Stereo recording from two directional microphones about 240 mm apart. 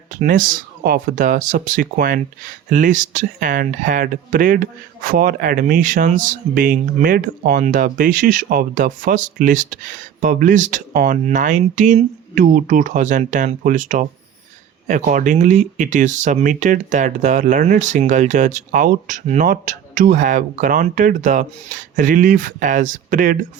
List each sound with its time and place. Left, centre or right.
0.2 s speech: right